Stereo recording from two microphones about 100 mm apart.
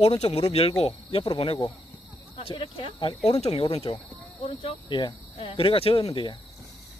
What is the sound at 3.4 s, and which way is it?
Speech, 85° left.